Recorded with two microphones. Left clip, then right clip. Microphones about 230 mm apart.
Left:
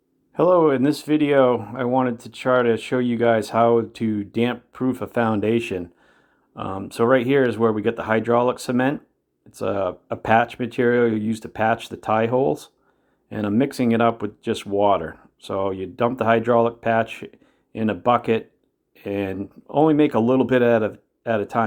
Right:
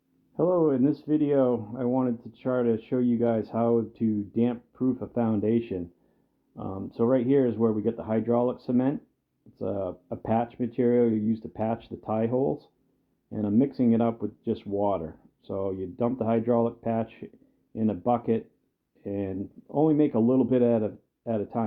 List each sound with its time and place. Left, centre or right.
0.3 s speech: centre
13.3 s speech: centre